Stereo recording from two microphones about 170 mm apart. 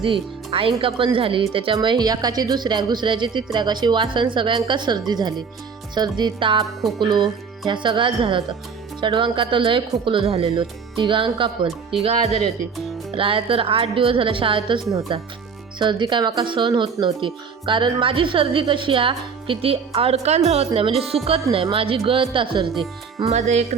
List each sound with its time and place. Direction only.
0.0 s speech: 30° right (ahead or behind)
13.1 s a woman's voice: 30° right (ahead or behind)
23.3 s a woman's voice: 40° right (ahead or behind)